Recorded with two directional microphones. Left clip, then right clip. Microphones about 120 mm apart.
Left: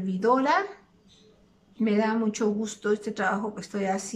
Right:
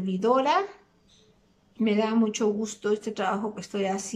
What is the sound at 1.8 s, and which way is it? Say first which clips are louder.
Speech: right 1 dB; 20° right (ahead or behind).